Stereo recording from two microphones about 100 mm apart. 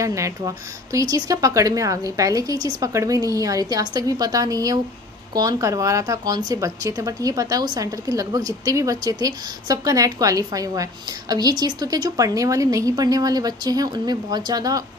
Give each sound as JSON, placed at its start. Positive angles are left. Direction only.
{"t": 0.0, "sound": "a woman's voice", "side_deg": -30}